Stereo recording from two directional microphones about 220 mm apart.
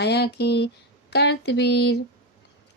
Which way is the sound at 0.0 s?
50° left (ahead or behind).